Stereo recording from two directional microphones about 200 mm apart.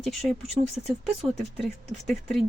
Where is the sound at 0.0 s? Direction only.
Centre (ahead or behind).